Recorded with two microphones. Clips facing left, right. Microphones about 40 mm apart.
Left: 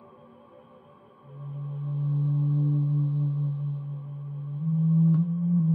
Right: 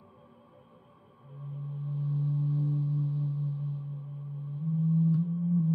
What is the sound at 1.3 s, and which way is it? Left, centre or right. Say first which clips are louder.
Singing bowl: left 3 dB; centre.